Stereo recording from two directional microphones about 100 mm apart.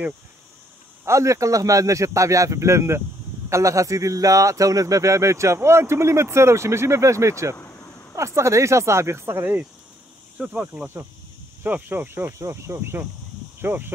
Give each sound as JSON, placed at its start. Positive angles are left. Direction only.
{"t": 1.0, "sound": "speech", "side_deg": -30}
{"t": 7.5, "sound": "vehicle", "side_deg": 25}
{"t": 8.2, "sound": "speech", "side_deg": -30}